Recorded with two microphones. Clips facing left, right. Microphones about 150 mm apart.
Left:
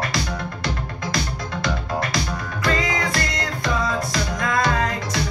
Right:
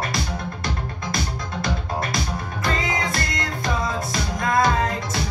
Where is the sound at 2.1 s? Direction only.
25° right (ahead or behind).